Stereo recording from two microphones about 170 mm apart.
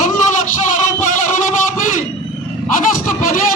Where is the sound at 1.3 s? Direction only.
50° left (ahead or behind).